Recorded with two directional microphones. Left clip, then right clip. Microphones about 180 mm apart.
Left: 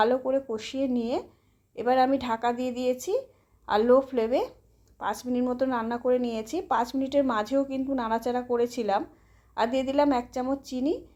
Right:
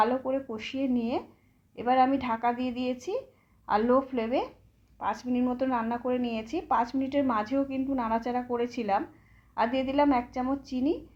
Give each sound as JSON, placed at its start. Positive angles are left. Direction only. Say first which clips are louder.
{"t": 0.0, "sound": "speech", "louder": "left 3 dB", "side_deg": 45}